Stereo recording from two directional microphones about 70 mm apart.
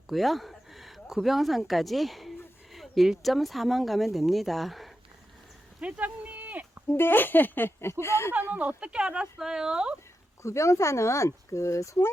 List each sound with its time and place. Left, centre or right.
0.1 s speech: centre
5.8 s a sound: right
6.9 s speech: left
8.3 s speech: right
10.4 s speech: left